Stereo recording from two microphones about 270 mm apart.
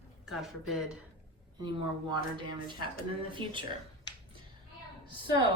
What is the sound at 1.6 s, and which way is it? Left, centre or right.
Speech, centre.